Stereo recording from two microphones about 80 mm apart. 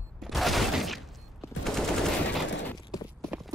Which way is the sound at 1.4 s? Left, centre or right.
Left.